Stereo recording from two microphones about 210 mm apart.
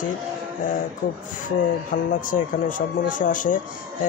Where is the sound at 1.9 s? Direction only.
40° left (ahead or behind).